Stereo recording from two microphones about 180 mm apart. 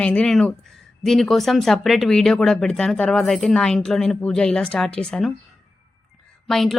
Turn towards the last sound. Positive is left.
turn(degrees=0)  # may be behind; listen again after turning